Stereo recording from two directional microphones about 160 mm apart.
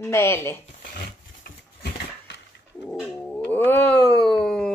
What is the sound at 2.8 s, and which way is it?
Cat, 5° left (ahead or behind).